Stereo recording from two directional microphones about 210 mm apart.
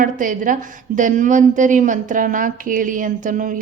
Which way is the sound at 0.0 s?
40° right (ahead or behind).